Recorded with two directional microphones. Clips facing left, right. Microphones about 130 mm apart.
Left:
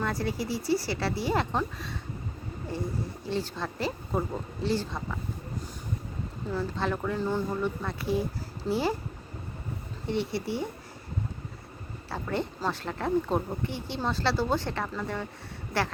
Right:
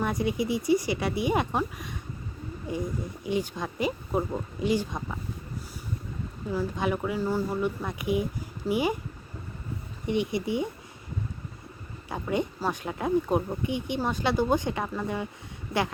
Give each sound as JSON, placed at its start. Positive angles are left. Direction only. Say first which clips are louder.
{"t": 0.0, "sound": "speech", "louder": "right 3 dB", "side_deg": -20}
{"t": 6.5, "sound": "speech", "louder": "right 2 dB", "side_deg": -10}
{"t": 10.1, "sound": "speech", "louder": "right 3 dB", "side_deg": -15}
{"t": 12.0, "sound": "speech", "louder": "right 3 dB", "side_deg": -15}